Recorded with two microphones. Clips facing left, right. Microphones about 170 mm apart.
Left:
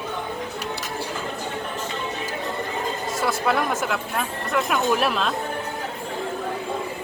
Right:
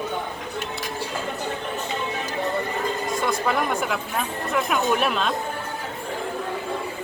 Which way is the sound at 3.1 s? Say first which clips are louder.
Left 2 dB; 5° left (ahead or behind).